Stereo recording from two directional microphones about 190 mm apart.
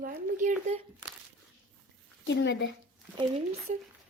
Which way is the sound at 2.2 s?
70° left (ahead or behind).